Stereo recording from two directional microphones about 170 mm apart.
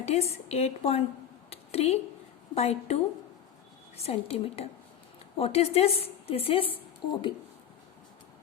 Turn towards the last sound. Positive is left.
turn(degrees=30)  # may be behind; listen again after turning